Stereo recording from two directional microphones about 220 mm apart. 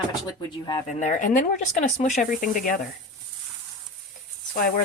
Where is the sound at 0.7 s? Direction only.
30° left (ahead or behind).